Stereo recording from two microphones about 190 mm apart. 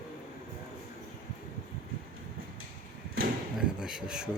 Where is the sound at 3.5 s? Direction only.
5° right (ahead or behind).